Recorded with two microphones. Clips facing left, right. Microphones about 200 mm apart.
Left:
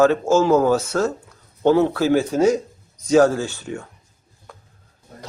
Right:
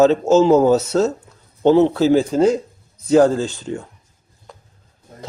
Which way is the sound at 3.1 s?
15° right (ahead or behind).